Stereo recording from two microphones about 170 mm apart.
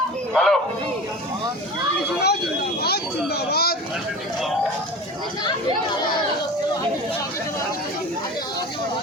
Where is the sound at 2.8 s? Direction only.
70° left (ahead or behind).